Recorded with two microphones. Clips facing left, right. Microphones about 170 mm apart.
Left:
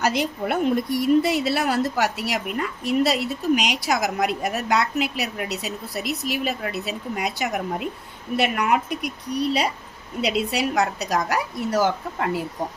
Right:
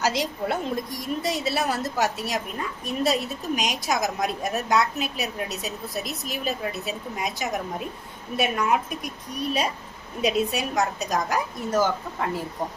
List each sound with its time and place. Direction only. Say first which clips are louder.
0.0 s a woman's voice: left 2 dB; 60° left (ahead or behind)